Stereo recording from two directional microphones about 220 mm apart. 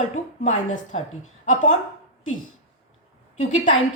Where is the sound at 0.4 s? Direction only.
35° left (ahead or behind).